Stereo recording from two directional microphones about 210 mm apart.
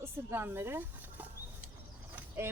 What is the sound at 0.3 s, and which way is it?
Speech, 10° right (ahead or behind).